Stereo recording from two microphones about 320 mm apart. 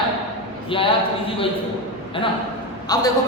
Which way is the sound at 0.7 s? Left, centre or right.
Centre.